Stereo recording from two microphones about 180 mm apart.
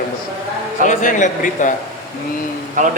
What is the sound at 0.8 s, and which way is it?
Speech, 45° left (ahead or behind).